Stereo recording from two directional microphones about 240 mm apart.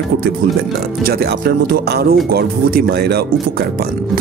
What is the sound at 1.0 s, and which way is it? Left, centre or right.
Speech, right.